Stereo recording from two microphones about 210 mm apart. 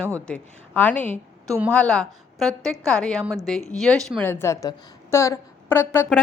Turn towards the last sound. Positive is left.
turn(degrees=10)  # may be behind; listen again after turning